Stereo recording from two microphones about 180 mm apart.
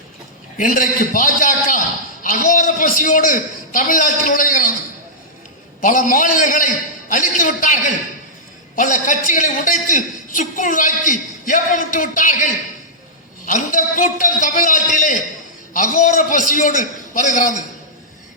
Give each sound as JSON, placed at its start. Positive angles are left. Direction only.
{"t": 0.5, "sound": "a man's voice", "side_deg": 50}
{"t": 5.8, "sound": "a man's voice", "side_deg": 50}